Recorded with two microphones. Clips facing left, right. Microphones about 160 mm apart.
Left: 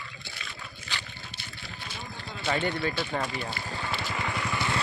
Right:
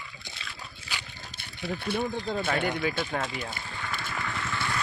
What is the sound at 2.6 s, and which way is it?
Speech, 10° right (ahead or behind).